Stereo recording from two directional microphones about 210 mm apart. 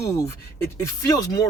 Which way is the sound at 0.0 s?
15° left (ahead or behind).